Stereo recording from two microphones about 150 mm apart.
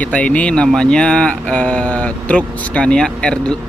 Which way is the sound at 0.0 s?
10° left (ahead or behind).